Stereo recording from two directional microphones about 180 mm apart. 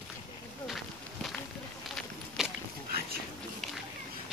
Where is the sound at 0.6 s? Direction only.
Centre (ahead or behind).